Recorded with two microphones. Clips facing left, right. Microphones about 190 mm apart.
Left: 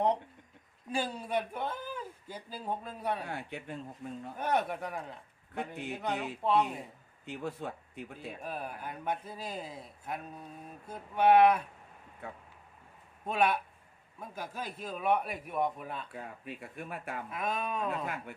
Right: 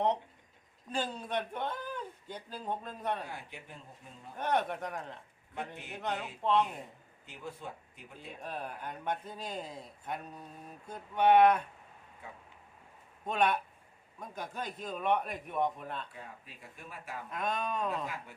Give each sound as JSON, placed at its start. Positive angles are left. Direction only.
{"t": 0.9, "sound": "a man's voice", "side_deg": 10}
{"t": 3.2, "sound": "speech", "side_deg": 60}
{"t": 4.4, "sound": "a man's voice", "side_deg": 10}
{"t": 7.3, "sound": "speech", "side_deg": 65}
{"t": 8.4, "sound": "a man's voice", "side_deg": 10}
{"t": 12.2, "sound": "speech", "side_deg": 60}
{"t": 13.2, "sound": "a man's voice", "side_deg": 5}
{"t": 16.1, "sound": "speech", "side_deg": 60}
{"t": 17.2, "sound": "a man's voice", "side_deg": 5}
{"t": 18.0, "sound": "speech", "side_deg": 55}